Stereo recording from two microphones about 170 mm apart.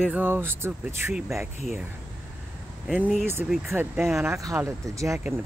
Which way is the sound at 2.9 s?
5° right (ahead or behind).